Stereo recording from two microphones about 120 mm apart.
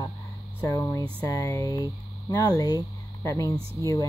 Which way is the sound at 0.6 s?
25° left (ahead or behind).